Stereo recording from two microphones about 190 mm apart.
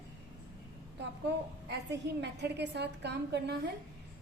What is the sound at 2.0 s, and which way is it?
A woman's voice, 60° right (ahead or behind).